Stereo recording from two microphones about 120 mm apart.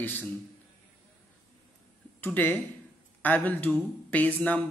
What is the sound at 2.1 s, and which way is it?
A man's voice, 15° left (ahead or behind).